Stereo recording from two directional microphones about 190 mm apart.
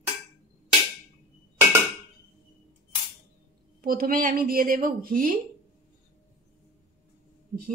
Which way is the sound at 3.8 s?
50° right (ahead or behind).